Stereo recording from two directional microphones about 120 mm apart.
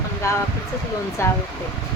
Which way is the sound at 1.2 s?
25° left (ahead or behind).